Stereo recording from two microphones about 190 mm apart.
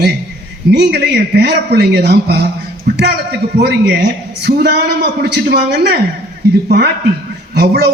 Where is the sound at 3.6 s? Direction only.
60° right (ahead or behind).